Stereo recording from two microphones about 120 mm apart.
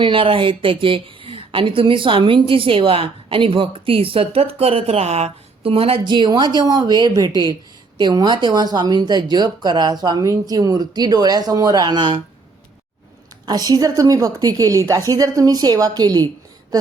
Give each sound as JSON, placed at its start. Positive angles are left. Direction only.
{"t": 0.0, "sound": "a woman's voice", "side_deg": -45}
{"t": 6.1, "sound": "speech", "side_deg": -40}
{"t": 13.4, "sound": "speech", "side_deg": -35}